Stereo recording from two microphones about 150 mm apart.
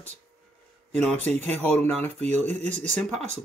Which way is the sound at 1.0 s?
5° left (ahead or behind).